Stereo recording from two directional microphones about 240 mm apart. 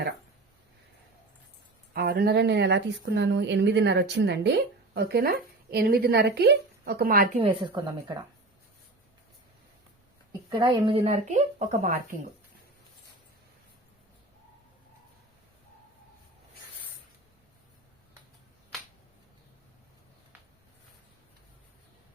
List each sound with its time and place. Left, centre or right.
1.9 s a woman's voice: right
7.3 s speech: right
10.5 s speech: centre